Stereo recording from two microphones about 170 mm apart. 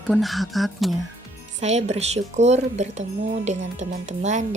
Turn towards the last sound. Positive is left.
turn(degrees=-45)  # may be behind; listen again after turning